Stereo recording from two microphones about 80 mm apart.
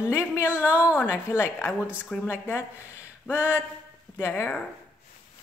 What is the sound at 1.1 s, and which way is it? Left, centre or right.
Speech, left.